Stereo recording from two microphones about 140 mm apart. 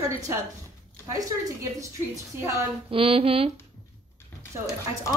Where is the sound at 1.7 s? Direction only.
20° right (ahead or behind).